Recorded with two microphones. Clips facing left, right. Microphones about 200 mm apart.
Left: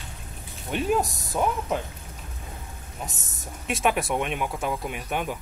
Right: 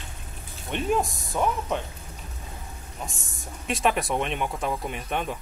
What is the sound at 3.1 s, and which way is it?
Speech, 20° left (ahead or behind).